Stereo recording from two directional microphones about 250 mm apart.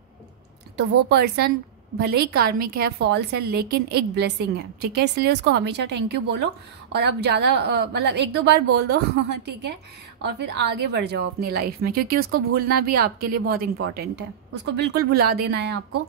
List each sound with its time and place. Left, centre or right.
0.7 s a woman's voice: right